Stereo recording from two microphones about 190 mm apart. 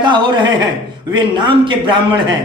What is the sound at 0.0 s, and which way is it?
Speech, 25° right (ahead or behind).